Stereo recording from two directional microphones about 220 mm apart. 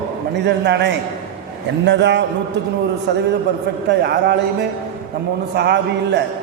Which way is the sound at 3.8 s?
50° right (ahead or behind).